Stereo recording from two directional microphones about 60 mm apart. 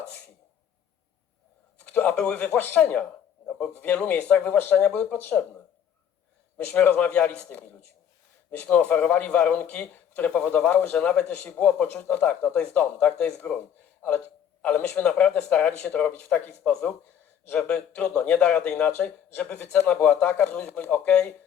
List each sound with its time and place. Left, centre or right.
1.8 s speech: left
6.6 s speech: left
8.7 s speech: left
10.9 s speech: centre
14.6 s speech: left
19.5 s a man's voice: left